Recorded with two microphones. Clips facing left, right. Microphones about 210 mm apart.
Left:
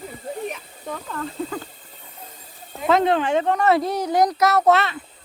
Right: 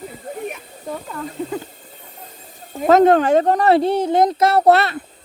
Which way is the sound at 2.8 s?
45° right (ahead or behind).